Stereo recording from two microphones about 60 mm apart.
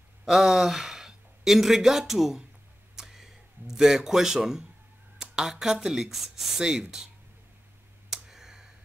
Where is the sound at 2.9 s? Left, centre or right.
Centre.